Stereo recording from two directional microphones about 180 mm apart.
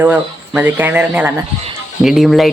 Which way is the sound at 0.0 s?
10° right (ahead or behind).